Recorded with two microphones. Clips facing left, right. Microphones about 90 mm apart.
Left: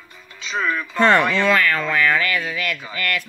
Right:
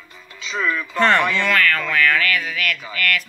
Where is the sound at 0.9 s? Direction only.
20° left (ahead or behind).